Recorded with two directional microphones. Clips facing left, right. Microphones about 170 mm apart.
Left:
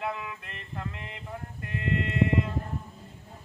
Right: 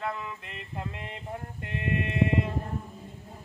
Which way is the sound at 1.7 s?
20° right (ahead or behind).